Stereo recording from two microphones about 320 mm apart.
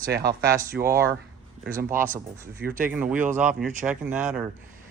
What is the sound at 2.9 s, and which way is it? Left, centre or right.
Speech, centre.